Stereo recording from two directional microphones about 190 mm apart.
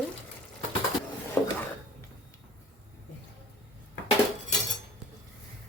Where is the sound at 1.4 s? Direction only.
10° left (ahead or behind).